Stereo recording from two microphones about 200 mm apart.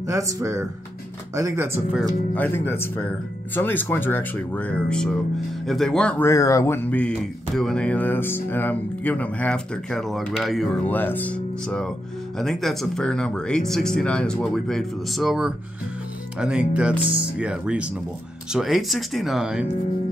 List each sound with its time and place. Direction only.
0.0 s speech: 15° right (ahead or behind)
2.3 s speech: 10° left (ahead or behind)